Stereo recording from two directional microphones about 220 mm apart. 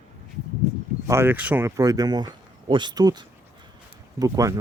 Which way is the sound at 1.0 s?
10° right (ahead or behind).